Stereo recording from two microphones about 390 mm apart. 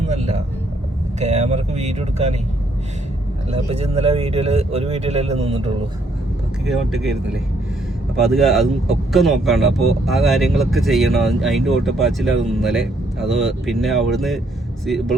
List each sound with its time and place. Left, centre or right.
0.1 s vehicle: centre
1.2 s speech: centre
3.5 s speech: centre
6.7 s speech: centre